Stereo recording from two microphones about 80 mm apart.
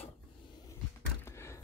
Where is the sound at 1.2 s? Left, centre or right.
Left.